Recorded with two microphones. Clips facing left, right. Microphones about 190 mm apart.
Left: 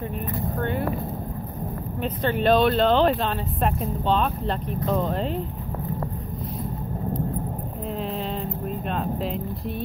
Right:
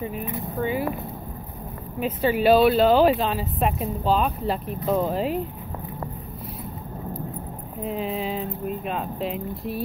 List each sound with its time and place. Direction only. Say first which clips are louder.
0.6 s speech: right 3 dB; 5° right (ahead or behind)
2.0 s speech: right 3 dB; 5° right (ahead or behind)
7.9 s speech: right 2 dB; centre (ahead or behind)